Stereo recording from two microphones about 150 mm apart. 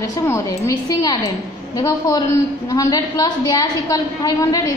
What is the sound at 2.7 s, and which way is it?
A woman's voice, 25° left (ahead or behind).